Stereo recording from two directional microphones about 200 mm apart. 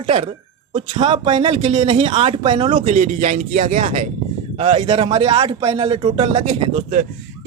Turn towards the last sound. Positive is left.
turn(degrees=-30)  # may be behind; listen again after turning